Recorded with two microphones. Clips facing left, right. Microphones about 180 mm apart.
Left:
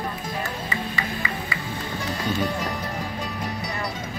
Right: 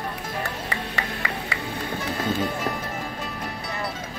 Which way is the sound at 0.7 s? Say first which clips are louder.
Left 1 dB; 70° right (ahead or behind).